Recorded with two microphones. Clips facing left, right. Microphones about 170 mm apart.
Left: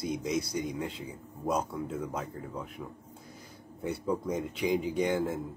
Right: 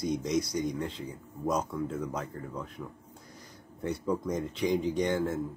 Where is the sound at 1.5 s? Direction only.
10° left (ahead or behind).